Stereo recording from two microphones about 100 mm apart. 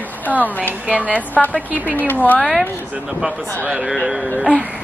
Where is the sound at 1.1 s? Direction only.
15° left (ahead or behind).